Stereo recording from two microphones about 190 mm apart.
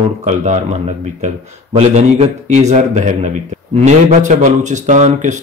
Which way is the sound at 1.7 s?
35° right (ahead or behind).